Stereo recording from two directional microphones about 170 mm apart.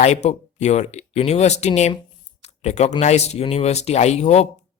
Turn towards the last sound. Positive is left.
turn(degrees=40)  # may be behind; listen again after turning